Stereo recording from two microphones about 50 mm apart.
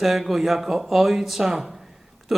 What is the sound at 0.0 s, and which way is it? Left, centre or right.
Speech, centre.